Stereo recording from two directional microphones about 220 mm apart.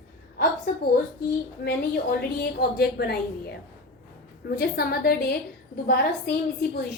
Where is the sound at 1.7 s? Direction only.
45° left (ahead or behind).